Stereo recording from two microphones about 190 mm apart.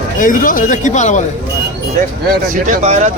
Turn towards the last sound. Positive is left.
turn(degrees=-35)  # may be behind; listen again after turning